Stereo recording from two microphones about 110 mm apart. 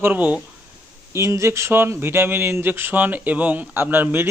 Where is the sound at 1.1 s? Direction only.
25° right (ahead or behind).